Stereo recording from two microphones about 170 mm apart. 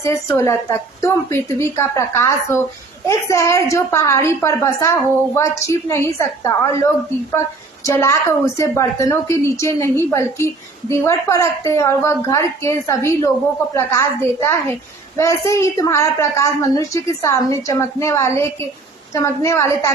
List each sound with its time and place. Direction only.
0.0 s a woman's voice: 15° left (ahead or behind)